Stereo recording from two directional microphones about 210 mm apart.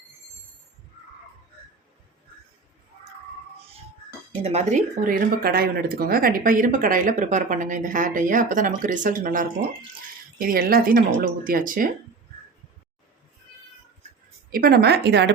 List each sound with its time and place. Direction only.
4.4 s speech: 30° right (ahead or behind)
14.5 s speech: 45° right (ahead or behind)